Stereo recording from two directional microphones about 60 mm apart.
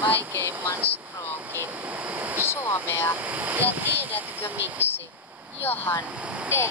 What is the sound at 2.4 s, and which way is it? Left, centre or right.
Vehicle, left.